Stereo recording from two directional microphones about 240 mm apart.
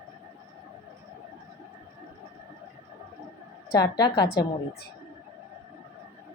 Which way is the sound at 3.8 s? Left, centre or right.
Centre.